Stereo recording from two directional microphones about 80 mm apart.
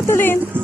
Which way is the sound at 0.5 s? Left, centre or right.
Right.